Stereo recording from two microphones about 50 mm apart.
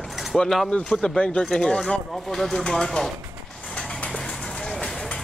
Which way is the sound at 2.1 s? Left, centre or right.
Centre.